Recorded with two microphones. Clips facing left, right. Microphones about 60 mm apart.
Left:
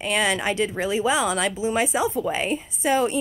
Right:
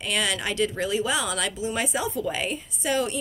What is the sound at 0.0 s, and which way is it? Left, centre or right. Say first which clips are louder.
Speech: left 4 dB; left.